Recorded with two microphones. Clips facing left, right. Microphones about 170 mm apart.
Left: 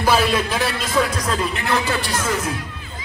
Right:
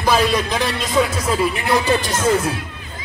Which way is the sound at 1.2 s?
10° right (ahead or behind).